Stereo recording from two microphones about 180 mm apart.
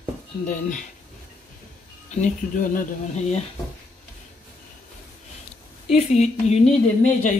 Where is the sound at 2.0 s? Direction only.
45° left (ahead or behind).